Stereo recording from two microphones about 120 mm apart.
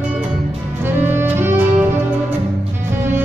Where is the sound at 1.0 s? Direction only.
20° right (ahead or behind).